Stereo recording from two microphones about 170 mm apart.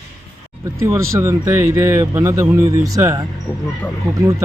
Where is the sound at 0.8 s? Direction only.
15° right (ahead or behind).